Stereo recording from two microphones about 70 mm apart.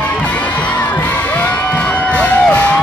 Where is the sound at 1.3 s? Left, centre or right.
Left.